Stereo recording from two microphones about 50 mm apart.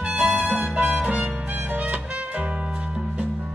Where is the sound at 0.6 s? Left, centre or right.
Centre.